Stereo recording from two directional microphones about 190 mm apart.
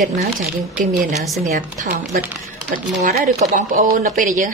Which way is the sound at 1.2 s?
Centre (ahead or behind).